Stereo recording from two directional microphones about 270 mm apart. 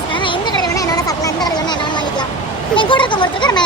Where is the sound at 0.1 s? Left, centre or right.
Centre.